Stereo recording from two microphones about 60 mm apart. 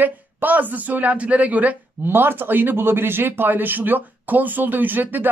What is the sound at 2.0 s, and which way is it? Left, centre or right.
Speech, right.